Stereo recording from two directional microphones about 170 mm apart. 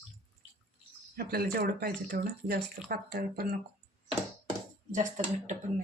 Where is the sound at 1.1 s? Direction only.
65° right (ahead or behind).